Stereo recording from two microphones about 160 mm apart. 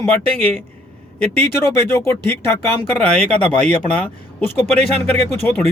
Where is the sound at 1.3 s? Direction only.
15° left (ahead or behind).